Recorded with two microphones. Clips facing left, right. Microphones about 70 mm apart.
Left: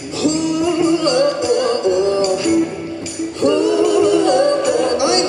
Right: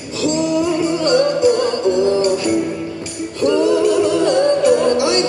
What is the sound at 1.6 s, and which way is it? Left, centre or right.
Music, left.